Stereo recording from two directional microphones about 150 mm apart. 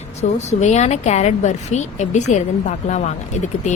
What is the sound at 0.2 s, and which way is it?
A woman's voice, 50° left (ahead or behind).